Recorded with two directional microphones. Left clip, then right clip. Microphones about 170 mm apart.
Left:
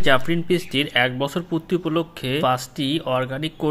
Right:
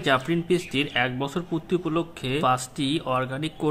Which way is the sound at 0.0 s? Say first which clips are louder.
Left 4 dB; 20° left (ahead or behind).